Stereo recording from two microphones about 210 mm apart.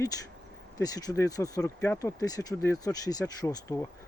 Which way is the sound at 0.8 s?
15° left (ahead or behind).